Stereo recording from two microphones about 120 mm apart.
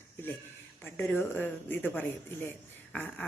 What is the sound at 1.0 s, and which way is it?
Speech, 15° left (ahead or behind).